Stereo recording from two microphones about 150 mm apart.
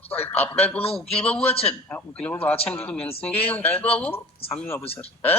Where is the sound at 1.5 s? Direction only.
40° left (ahead or behind).